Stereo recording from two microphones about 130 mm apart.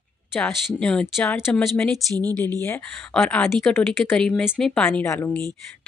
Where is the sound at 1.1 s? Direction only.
20° left (ahead or behind).